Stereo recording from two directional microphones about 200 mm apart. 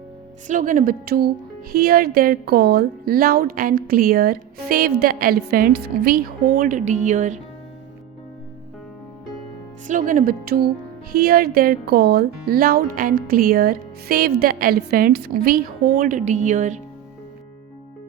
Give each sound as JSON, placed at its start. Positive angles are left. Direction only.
{"t": 0.4, "sound": "a woman's voice", "side_deg": -40}
{"t": 9.8, "sound": "a woman's voice", "side_deg": -40}